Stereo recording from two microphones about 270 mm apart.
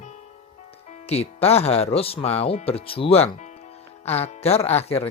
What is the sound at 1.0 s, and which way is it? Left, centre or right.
Speech, left.